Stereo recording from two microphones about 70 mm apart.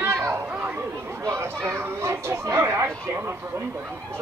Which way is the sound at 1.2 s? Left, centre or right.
Right.